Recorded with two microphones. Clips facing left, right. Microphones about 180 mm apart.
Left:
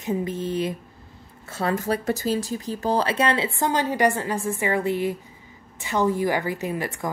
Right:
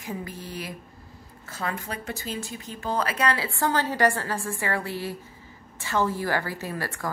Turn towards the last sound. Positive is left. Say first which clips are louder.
# left 5 dB
turn(degrees=20)  # may be behind; listen again after turning